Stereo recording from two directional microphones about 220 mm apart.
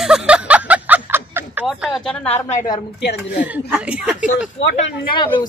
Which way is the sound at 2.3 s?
30° left (ahead or behind).